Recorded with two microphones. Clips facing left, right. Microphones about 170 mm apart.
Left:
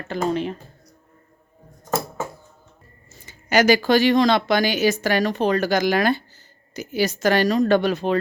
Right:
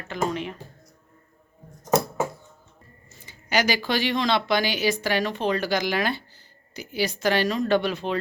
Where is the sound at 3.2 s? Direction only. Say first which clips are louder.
Left 7 dB; 45° left (ahead or behind).